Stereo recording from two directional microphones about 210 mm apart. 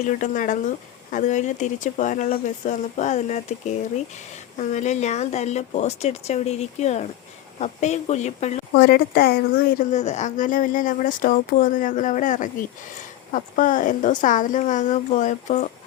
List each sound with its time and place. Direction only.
0.0 s speech: 35° left (ahead or behind)
8.7 s speech: 50° left (ahead or behind)